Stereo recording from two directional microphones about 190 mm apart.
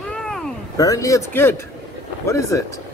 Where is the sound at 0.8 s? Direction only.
15° left (ahead or behind).